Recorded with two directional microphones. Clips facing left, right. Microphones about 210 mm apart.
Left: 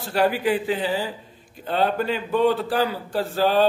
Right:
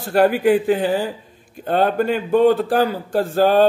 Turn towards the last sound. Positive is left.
turn(degrees=-50)  # may be behind; listen again after turning